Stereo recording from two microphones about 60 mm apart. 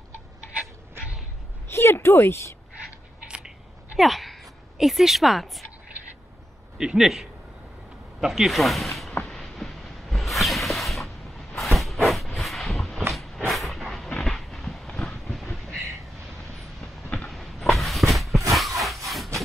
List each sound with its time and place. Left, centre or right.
1.7 s speech: left
3.3 s scissors: centre
4.0 s speech: centre
6.8 s a man's voice: centre
9.2 s a sound: centre
13.5 s vehicle: centre
17.3 s a sound: centre